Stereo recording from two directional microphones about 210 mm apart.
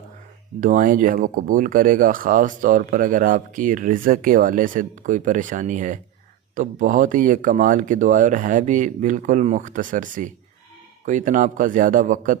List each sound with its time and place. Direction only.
0.6 s speech: 40° right (ahead or behind)